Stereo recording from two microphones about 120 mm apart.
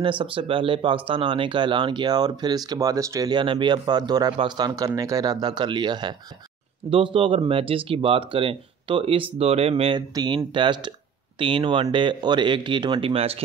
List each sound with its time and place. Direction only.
0.0 s speech: 45° right (ahead or behind)
9.9 s speech: 35° right (ahead or behind); by 13.4 s 55° right (ahead or behind)